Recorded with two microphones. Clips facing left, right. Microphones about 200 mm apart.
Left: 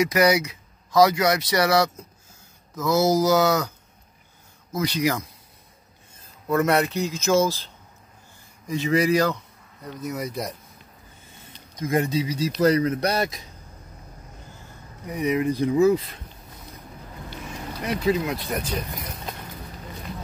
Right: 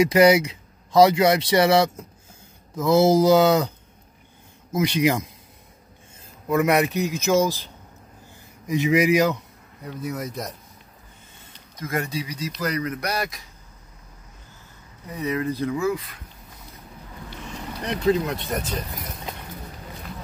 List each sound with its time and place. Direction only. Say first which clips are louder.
0.0 s speech: right 4 dB; 25° right (ahead or behind)
4.7 s speech: right 3 dB; 20° right (ahead or behind)
6.5 s a man's voice: right 1 dB; 15° right (ahead or behind)
9.8 s speech: even; 5° right (ahead or behind)
11.8 s speech: left 5 dB; 20° left (ahead or behind)
15.0 s speech: left 3 dB; 15° left (ahead or behind)
17.8 s speech: right 2 dB; centre (ahead or behind)